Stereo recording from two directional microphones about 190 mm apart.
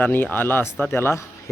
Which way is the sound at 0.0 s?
10° left (ahead or behind).